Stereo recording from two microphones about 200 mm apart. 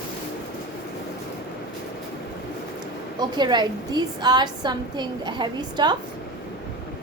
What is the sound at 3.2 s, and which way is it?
A woman's voice, 20° right (ahead or behind).